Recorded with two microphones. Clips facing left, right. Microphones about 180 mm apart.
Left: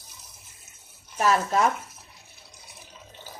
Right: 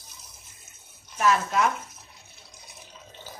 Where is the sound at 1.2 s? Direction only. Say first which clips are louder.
Left 1 dB; 40° left (ahead or behind).